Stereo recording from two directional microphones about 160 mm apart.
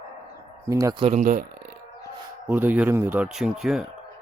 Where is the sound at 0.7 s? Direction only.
20° right (ahead or behind).